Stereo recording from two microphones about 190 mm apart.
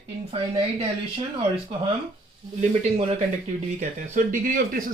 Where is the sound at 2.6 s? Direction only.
35° right (ahead or behind).